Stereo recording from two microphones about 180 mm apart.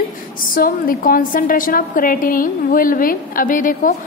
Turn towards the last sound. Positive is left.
turn(degrees=50)  # may be behind; listen again after turning